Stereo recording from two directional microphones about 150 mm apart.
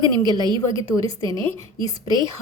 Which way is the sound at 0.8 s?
20° left (ahead or behind).